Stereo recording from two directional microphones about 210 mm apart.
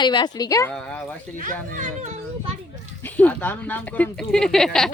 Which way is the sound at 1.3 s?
35° right (ahead or behind).